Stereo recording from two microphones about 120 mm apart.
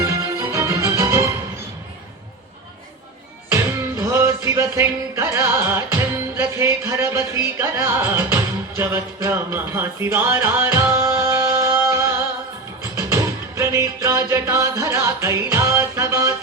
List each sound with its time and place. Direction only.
0.0 s music: 25° right (ahead or behind)
3.5 s music: 25° right (ahead or behind)